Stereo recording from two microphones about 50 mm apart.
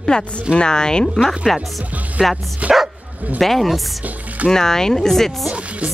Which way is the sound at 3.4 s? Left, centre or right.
Centre.